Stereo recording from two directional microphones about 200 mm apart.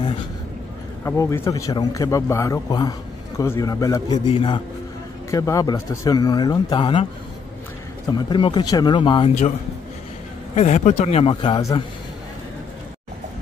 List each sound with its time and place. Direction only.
1.0 s a man's voice: 10° left (ahead or behind)
5.3 s speech: 15° left (ahead or behind)
8.1 s speech: 20° left (ahead or behind)
10.5 s a man's voice: 35° left (ahead or behind)